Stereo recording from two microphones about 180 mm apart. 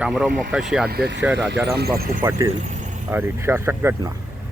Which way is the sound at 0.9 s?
65° right (ahead or behind).